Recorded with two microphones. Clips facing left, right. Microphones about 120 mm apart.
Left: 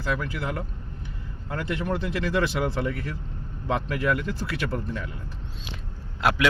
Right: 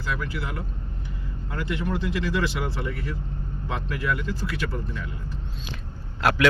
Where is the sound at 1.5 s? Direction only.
45° left (ahead or behind).